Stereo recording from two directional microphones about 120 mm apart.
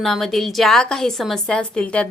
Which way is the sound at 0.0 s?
5° left (ahead or behind).